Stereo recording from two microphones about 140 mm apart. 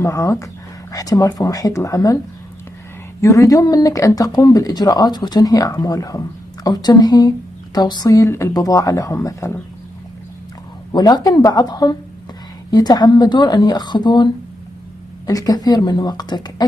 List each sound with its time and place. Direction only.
0.0 s speech: 25° left (ahead or behind)
3.2 s speech: 20° left (ahead or behind)
10.9 s speech: 30° left (ahead or behind)